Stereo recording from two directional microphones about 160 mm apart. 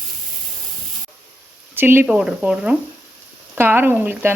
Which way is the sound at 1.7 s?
15° right (ahead or behind).